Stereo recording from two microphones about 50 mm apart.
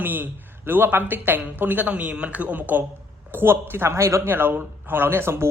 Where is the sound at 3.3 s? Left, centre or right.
Right.